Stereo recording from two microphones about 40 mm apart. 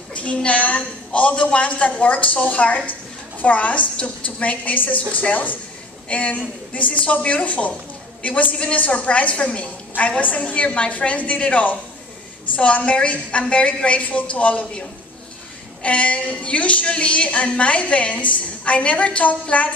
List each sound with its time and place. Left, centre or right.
0.1 s a woman's voice: left
6.0 s a woman's voice: left